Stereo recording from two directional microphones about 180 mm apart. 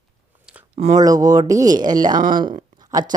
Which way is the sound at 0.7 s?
40° right (ahead or behind).